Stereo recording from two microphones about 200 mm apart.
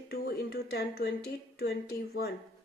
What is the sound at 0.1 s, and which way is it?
Speech, 55° left (ahead or behind).